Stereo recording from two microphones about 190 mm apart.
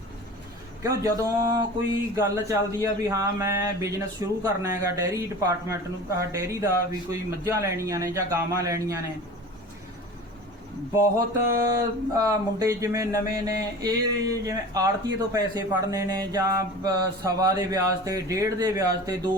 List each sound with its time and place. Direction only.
0.8 s speech: 15° right (ahead or behind)
11.6 s speech: 20° right (ahead or behind)